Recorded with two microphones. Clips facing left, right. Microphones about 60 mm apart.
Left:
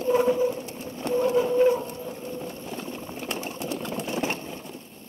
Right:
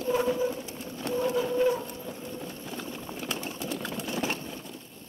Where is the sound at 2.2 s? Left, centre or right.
Left.